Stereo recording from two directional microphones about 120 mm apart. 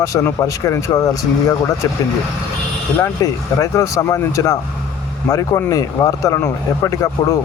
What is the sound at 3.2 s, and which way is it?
Speech, 30° left (ahead or behind).